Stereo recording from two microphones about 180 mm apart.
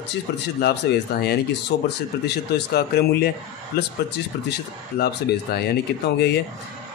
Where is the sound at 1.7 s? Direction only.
85° left.